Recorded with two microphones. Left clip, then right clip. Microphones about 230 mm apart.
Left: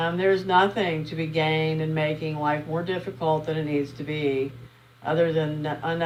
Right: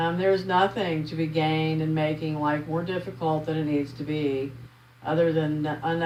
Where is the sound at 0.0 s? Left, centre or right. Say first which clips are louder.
Left 1 dB; left.